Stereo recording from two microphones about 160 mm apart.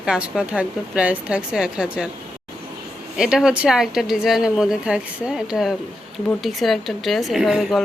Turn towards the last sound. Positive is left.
turn(degrees=0)  # may be behind; listen again after turning